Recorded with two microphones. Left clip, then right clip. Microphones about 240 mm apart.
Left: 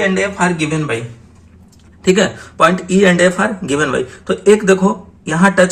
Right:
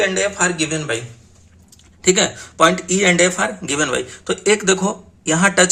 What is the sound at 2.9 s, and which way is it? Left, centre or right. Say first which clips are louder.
Speech: left 4 dB; right.